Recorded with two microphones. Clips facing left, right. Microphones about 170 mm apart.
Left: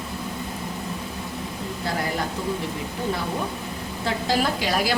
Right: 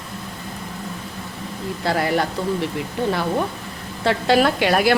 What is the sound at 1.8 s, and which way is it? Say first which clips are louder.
Speech: right 7 dB; 75° right (ahead or behind).